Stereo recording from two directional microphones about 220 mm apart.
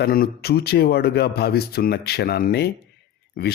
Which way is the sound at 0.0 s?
40° left (ahead or behind).